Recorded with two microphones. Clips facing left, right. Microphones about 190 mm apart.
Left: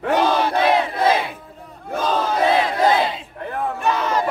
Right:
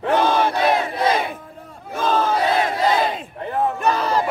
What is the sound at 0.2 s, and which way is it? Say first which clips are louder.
Battle cry: left 1 dB; 50° right (ahead or behind).